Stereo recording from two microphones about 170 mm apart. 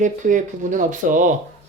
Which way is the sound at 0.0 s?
50° right (ahead or behind).